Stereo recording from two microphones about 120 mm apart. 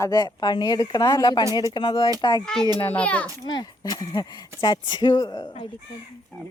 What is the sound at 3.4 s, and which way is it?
Speech, 35° left (ahead or behind).